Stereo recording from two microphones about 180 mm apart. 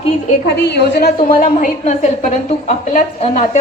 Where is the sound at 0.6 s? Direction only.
70° left (ahead or behind).